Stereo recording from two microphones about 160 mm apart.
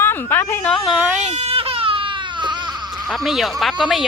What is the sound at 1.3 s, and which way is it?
Baby cry, 40° right (ahead or behind).